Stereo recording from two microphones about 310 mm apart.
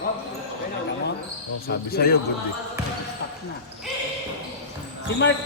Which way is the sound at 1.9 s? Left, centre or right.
Left.